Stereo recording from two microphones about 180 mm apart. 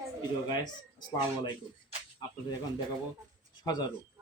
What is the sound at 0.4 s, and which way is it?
Speech, 25° left (ahead or behind).